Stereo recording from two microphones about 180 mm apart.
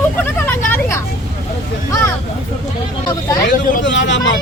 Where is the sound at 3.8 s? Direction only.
90° left.